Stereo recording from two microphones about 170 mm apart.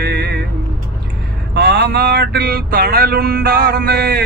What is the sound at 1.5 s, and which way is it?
Vehicle, 90° right.